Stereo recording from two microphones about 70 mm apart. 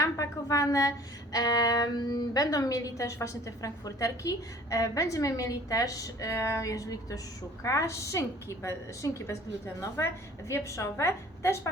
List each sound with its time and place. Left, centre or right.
0.0 s a woman's voice: left
10.5 s a woman's voice: left